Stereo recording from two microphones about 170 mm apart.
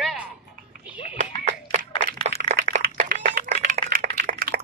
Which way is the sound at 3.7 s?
60° right (ahead or behind).